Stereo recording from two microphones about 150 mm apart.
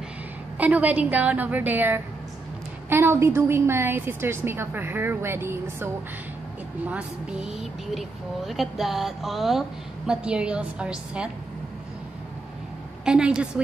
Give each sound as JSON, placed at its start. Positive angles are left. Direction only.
{"t": 0.6, "sound": "a woman's voice", "side_deg": -10}
{"t": 13.0, "sound": "a woman's voice", "side_deg": -5}